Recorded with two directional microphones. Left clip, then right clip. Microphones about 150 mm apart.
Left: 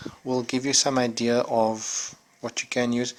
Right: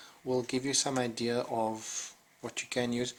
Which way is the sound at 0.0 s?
55° left (ahead or behind).